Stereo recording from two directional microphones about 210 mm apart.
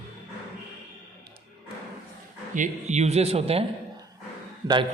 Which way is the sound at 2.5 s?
35° right (ahead or behind).